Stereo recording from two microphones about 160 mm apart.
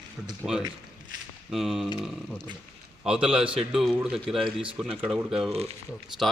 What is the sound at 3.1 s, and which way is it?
A man's voice, 5° right (ahead or behind).